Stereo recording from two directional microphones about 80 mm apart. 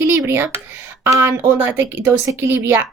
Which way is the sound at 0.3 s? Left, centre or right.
Right.